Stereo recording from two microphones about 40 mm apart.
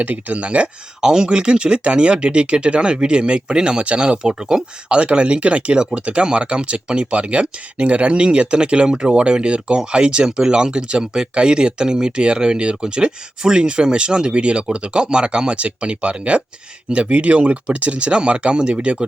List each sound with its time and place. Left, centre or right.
0.0 s speech: right
1.0 s speech: centre